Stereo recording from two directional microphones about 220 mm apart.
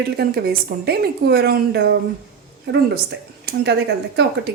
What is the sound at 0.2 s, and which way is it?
A woman's voice, 45° right (ahead or behind).